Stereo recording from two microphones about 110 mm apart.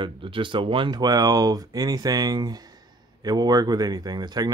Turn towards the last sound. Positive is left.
turn(degrees=-40)  # may be behind; listen again after turning